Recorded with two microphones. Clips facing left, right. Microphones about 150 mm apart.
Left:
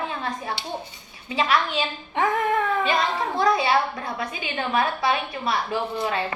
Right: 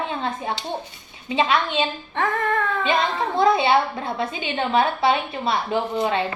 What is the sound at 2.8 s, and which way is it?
A woman's voice, 25° right (ahead or behind).